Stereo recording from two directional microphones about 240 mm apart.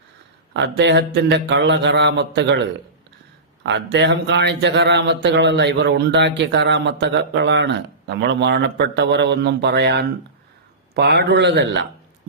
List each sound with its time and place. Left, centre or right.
0.5 s speech: right